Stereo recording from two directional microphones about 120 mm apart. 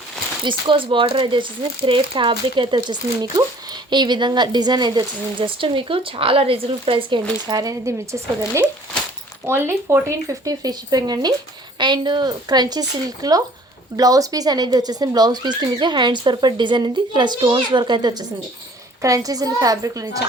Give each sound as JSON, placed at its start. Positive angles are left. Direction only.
{"t": 0.4, "sound": "speech", "side_deg": -45}
{"t": 7.5, "sound": "a woman's voice", "side_deg": -30}